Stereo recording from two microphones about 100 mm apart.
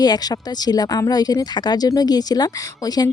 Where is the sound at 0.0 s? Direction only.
40° left (ahead or behind).